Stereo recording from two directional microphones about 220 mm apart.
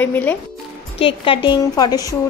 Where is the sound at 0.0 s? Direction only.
10° left (ahead or behind).